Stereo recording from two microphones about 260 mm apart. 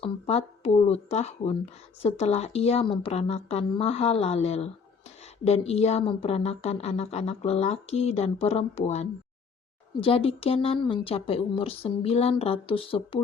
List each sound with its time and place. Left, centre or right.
0.0 s speech: left